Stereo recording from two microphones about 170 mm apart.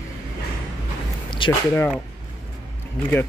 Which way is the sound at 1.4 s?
30° left (ahead or behind).